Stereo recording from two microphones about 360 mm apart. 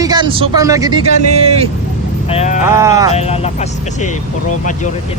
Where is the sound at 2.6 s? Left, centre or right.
Centre.